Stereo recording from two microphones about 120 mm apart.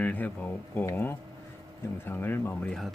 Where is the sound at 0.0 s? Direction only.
15° left (ahead or behind).